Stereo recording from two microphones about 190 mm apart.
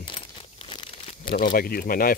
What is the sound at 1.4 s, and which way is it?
Speech, 50° left (ahead or behind).